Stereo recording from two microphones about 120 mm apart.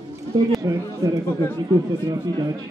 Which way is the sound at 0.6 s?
30° right (ahead or behind).